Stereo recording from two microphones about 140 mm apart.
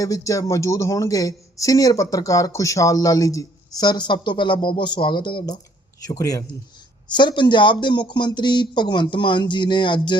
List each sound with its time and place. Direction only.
0.0 s speech: 25° left (ahead or behind)